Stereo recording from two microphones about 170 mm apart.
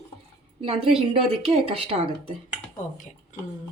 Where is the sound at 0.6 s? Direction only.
35° right (ahead or behind).